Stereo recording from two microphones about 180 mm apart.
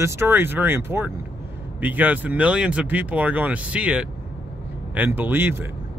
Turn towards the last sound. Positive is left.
turn(degrees=-10)  # may be behind; listen again after turning